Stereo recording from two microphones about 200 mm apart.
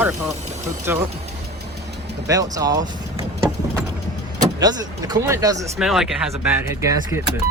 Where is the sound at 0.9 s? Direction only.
10° right (ahead or behind).